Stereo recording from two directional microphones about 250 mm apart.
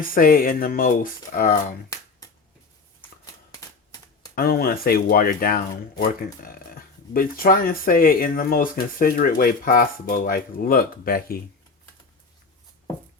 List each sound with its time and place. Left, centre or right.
0.1 s speech: left
4.4 s speech: left